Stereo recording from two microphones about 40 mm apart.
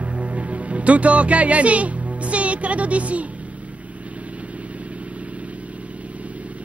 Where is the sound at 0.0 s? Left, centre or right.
Right.